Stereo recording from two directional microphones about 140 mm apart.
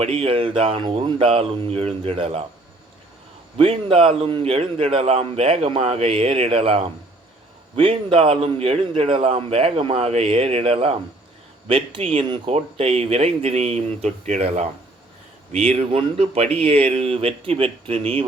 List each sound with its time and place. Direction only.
0.0 s speech: 45° right (ahead or behind)
3.6 s a man's voice: 40° right (ahead or behind)